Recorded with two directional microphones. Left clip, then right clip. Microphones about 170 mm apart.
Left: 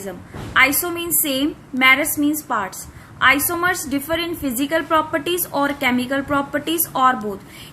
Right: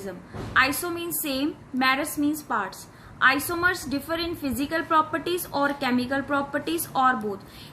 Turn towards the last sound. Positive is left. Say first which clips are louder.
# left 5 dB
turn(degrees=15)  # may be behind; listen again after turning